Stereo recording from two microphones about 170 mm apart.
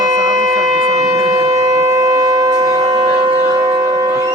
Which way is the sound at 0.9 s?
20° right (ahead or behind).